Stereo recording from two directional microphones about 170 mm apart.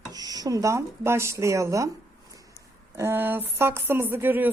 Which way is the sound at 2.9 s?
15° right (ahead or behind).